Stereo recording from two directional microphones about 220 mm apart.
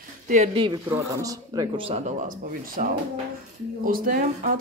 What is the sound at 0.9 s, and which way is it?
Speech, 15° right (ahead or behind).